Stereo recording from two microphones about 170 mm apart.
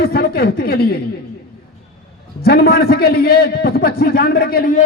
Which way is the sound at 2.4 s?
65° left (ahead or behind).